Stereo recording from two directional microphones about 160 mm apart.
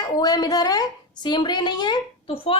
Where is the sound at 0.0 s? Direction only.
25° left (ahead or behind).